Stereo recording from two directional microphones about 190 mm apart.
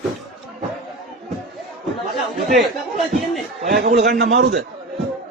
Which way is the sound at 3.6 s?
50° right (ahead or behind).